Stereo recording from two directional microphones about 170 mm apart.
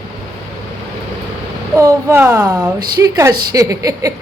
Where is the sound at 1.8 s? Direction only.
15° right (ahead or behind).